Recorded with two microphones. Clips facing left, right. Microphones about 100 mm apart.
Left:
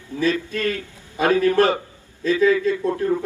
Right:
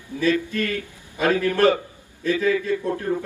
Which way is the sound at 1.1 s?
20° left (ahead or behind).